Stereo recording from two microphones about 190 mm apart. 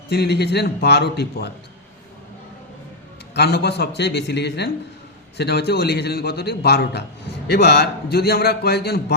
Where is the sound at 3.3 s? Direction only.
60° left (ahead or behind).